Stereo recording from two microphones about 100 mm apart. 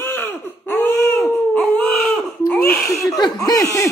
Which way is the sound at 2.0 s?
10° left (ahead or behind).